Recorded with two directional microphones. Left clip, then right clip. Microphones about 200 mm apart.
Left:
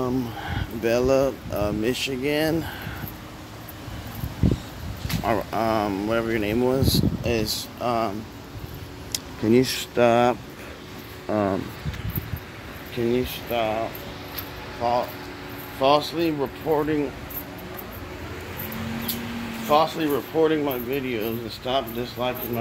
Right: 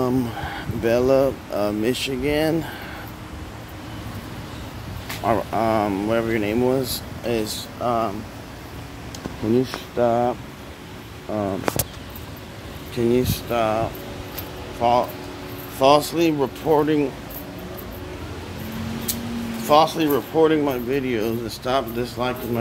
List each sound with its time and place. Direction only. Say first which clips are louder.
0.0 s speech: right 4 dB; centre (ahead or behind)
5.0 s speech: right 3 dB; 5° left (ahead or behind)
9.1 s speech: left 1 dB; 30° left (ahead or behind)
12.9 s speech: right 4 dB; 5° right (ahead or behind)
19.7 s speech: right 4 dB; 5° right (ahead or behind)